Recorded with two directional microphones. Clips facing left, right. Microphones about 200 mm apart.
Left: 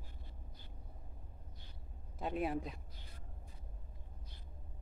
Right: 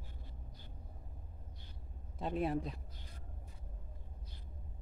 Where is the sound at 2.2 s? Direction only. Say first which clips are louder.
Right 2 dB; centre (ahead or behind).